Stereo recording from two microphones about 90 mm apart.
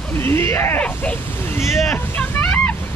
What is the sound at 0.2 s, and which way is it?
Speech, 25° left (ahead or behind).